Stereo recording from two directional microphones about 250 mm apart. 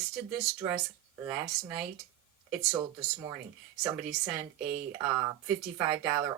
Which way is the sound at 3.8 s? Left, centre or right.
Centre.